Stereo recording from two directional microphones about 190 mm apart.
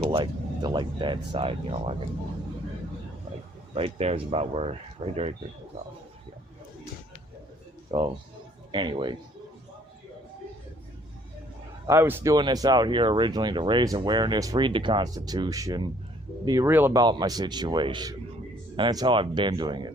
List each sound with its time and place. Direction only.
0.0 s speech: 30° right (ahead or behind)
3.8 s speech: 30° right (ahead or behind)
7.9 s speech: 25° right (ahead or behind)
11.9 s speech: 10° right (ahead or behind)
17.0 s speech: 20° right (ahead or behind)